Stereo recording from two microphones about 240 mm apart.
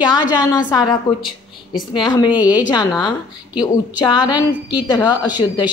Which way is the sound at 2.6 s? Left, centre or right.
Centre.